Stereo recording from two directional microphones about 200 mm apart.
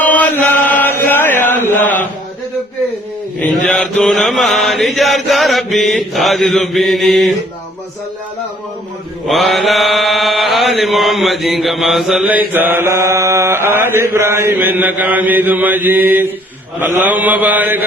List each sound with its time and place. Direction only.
0.0 s chant: 5° left (ahead or behind)
1.5 s mantra: 10° left (ahead or behind)
3.4 s mantra: 5° left (ahead or behind)
9.2 s mantra: centre (ahead or behind)